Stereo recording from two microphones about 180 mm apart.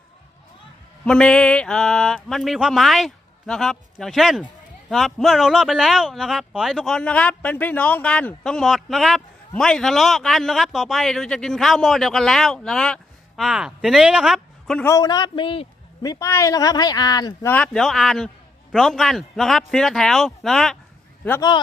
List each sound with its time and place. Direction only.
1.0 s speech: 5° left (ahead or behind)
14.8 s speech: 20° left (ahead or behind)
16.0 s speech: 20° left (ahead or behind)
17.5 s speech: 5° left (ahead or behind)